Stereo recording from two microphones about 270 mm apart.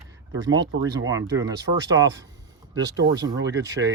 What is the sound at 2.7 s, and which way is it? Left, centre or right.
Speech, right.